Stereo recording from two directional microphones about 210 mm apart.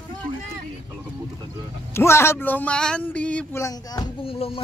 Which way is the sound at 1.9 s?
10° left (ahead or behind).